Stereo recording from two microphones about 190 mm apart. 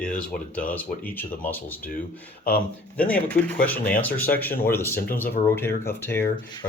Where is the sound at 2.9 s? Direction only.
5° left (ahead or behind).